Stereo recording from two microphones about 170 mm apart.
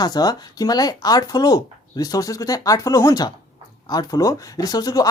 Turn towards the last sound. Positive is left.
turn(degrees=25)  # may be behind; listen again after turning